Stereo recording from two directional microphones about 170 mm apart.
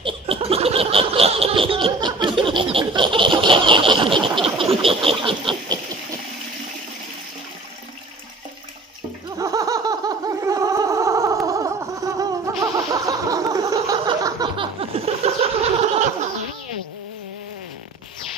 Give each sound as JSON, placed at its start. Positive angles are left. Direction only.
{"t": 0.0, "sound": "laughter", "side_deg": -35}
{"t": 4.6, "sound": "vehicle", "side_deg": -35}
{"t": 9.4, "sound": "a sound", "side_deg": -20}